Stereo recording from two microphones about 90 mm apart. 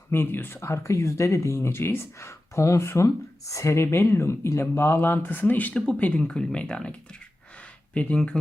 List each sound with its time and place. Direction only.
0.1 s speech: 25° left (ahead or behind)
7.9 s speech: 10° left (ahead or behind)